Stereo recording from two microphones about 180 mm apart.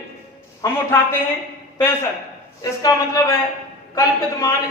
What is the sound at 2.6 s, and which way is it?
A man's voice, 20° left (ahead or behind).